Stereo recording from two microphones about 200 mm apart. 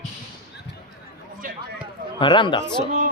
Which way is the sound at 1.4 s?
45° right (ahead or behind).